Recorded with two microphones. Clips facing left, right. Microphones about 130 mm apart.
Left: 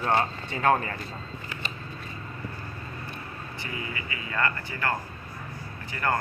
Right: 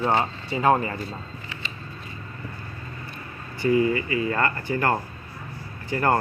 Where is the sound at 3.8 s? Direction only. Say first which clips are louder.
Right 13 dB; 40° right (ahead or behind).